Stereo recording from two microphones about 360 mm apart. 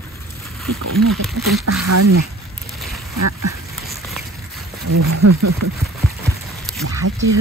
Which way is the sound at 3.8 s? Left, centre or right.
Centre.